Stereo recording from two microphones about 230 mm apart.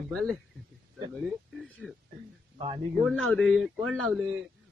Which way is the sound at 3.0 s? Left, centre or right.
Centre.